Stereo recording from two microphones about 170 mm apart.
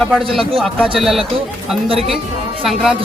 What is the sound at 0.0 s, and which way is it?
Speech, 5° left (ahead or behind).